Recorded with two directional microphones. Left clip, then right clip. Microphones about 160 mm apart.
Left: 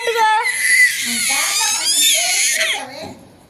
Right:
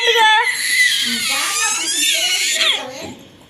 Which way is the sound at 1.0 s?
5° left (ahead or behind).